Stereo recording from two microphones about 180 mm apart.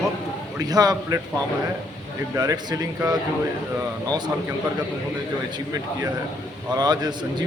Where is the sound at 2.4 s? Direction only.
20° right (ahead or behind).